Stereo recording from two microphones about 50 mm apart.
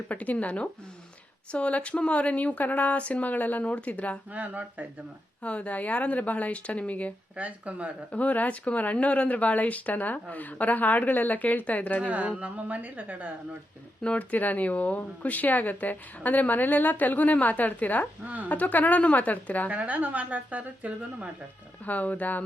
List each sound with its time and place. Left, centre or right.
0.1 s speech: left
4.3 s a woman's voice: right
5.4 s speech: left
7.3 s speech: right
8.1 s speech: left
12.0 s a woman's voice: right
14.0 s speech: left
19.7 s a woman's voice: right
21.8 s speech: left